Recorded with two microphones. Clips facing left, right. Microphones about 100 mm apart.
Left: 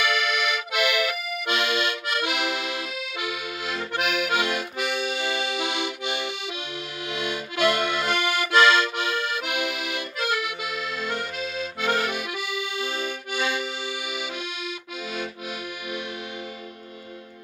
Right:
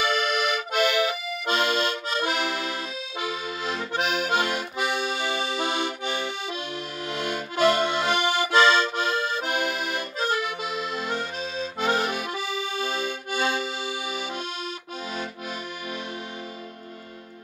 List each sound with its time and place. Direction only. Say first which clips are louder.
0.0 s accordion: right 1 dB; 40° right (ahead or behind)
7.6 s accordion: right 2 dB; 30° right (ahead or behind)